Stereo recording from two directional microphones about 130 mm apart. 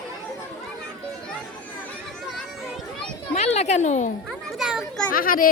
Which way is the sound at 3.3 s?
60° left (ahead or behind).